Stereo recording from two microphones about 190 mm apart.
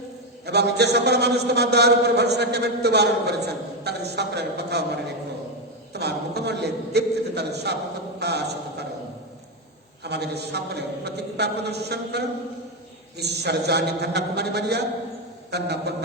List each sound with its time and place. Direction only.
0.4 s a man's voice: 60° right (ahead or behind)
8.2 s a sound: 60° right (ahead or behind)
10.0 s a man's voice: 60° right (ahead or behind)